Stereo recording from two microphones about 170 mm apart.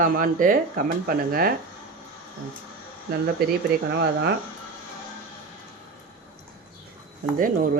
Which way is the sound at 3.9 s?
80° right.